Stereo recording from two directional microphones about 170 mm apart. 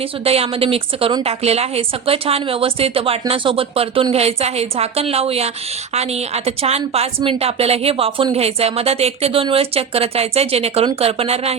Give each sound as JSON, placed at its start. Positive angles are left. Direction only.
{"t": 0.3, "sound": "a woman's voice", "side_deg": -35}